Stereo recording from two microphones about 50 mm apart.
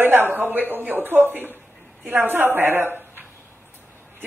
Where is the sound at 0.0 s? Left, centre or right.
Right.